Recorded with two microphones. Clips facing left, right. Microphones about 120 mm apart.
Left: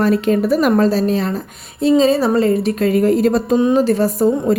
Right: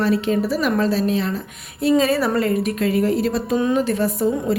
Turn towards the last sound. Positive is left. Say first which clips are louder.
# left 5 dB
turn(degrees=40)  # may be behind; listen again after turning